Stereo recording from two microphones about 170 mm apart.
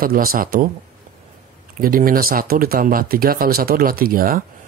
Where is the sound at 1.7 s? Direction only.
55° right (ahead or behind).